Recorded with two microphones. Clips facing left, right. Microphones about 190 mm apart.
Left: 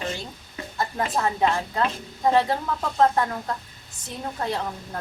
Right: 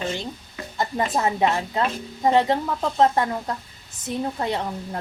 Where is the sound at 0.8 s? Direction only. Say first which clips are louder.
Right 2 dB; 20° right (ahead or behind).